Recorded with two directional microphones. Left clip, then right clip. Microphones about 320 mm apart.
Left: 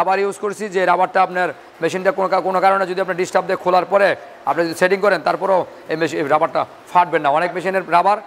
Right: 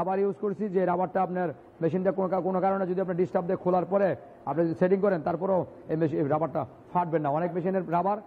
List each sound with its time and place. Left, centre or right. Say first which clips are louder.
0.0 s a man's voice: left 10 dB; centre